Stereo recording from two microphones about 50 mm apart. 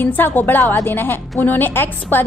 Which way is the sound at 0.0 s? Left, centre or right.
Left.